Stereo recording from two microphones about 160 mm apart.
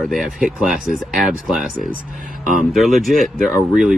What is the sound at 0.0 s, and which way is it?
Speech, centre (ahead or behind).